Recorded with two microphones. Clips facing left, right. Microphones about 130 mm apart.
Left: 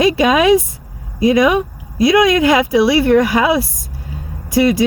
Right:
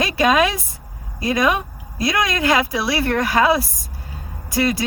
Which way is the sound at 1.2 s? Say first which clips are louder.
Left 7 dB; 15° left (ahead or behind).